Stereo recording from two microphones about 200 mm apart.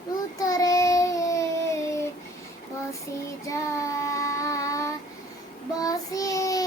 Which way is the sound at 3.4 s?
15° left (ahead or behind).